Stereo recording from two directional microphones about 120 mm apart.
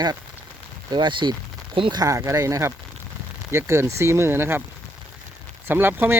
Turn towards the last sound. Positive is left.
turn(degrees=-15)  # may be behind; listen again after turning